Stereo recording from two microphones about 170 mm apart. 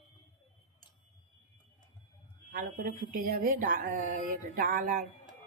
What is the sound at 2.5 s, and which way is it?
Speech, 50° right (ahead or behind).